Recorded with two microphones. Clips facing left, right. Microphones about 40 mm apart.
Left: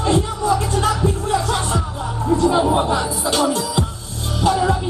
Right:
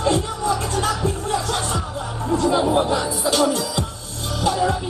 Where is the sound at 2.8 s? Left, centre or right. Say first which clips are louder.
Left 1 dB; centre.